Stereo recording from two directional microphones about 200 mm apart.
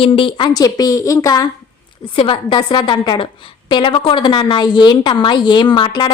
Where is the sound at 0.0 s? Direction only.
25° left (ahead or behind).